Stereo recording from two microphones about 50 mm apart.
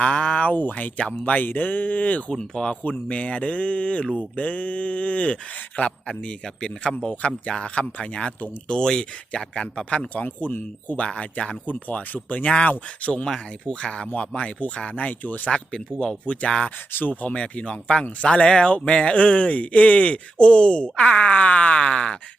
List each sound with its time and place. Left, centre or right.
0.0 s speech: left
2.3 s speech: centre
10.2 s speech: left
11.0 s speech: left
12.5 s speech: left
13.2 s speech: centre; by 15.4 s left
15.4 s speech: centre
16.9 s speech: left; by 22.2 s centre